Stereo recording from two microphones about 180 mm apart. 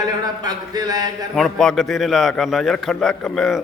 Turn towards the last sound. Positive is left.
turn(degrees=5)  # may be behind; listen again after turning